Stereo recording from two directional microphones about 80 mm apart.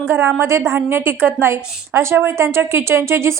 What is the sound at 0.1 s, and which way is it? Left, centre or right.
A woman's voice, right.